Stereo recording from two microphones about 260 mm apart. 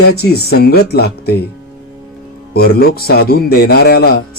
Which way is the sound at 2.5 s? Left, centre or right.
Left.